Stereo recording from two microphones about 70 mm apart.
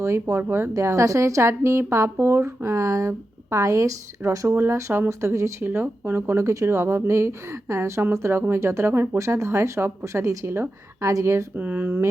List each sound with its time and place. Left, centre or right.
0.0 s speech: right
0.7 s speech: right
4.4 s speech: right
5.6 s speech: right
6.2 s speech: right
11.5 s speech: right